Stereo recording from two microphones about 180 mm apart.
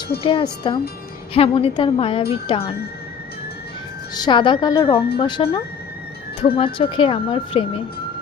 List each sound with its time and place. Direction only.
0.2 s a woman's voice: 30° left (ahead or behind)
4.1 s speech: 25° left (ahead or behind)